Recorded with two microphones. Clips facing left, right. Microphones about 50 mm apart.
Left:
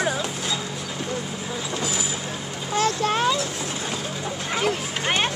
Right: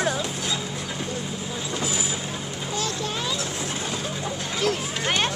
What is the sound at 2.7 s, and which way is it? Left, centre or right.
Vehicle, left.